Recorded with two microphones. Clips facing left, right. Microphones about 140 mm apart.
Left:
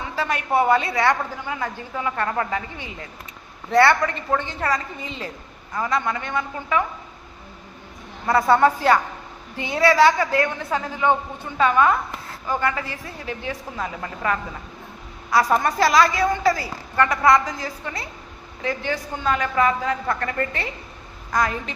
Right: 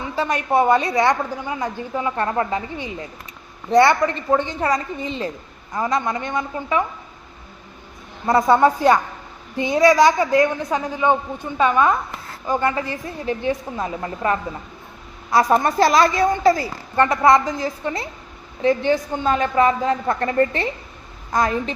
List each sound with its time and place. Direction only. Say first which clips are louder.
0.2 s a woman's voice: right 3 dB; 20° right (ahead or behind)
8.3 s a woman's voice: right 2 dB; 20° right (ahead or behind)